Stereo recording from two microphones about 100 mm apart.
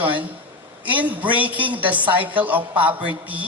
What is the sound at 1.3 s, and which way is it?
Speech, 15° right (ahead or behind).